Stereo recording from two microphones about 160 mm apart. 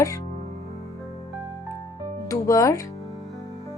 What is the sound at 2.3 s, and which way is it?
Speech, 20° left (ahead or behind).